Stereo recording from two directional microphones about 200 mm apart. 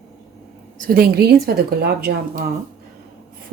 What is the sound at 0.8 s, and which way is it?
A woman's voice, 50° right (ahead or behind).